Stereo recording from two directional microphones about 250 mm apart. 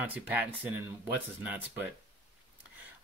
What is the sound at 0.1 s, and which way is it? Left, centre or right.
Speech, centre.